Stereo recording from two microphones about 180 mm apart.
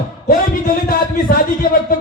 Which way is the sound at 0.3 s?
55° left (ahead or behind).